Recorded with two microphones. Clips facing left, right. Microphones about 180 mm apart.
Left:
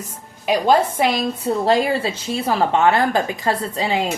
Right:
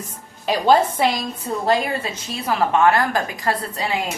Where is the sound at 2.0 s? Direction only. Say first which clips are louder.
Left 5 dB; 30° left (ahead or behind).